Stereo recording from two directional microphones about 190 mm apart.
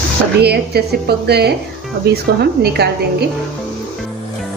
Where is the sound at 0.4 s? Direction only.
60° right (ahead or behind).